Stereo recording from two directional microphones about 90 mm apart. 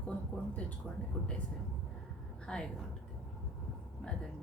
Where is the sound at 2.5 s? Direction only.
10° left (ahead or behind).